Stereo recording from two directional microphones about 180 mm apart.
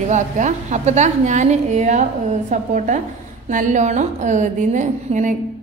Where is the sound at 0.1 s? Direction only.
40° right (ahead or behind).